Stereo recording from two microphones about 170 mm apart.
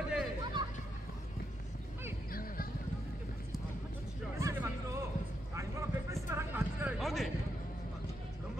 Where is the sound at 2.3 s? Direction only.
60° left (ahead or behind).